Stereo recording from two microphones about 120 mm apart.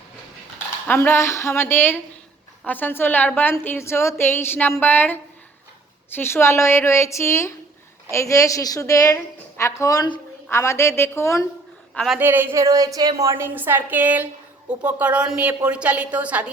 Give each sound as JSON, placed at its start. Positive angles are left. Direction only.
{"t": 0.9, "sound": "a woman's voice", "side_deg": 20}
{"t": 12.2, "sound": "a woman's voice", "side_deg": -15}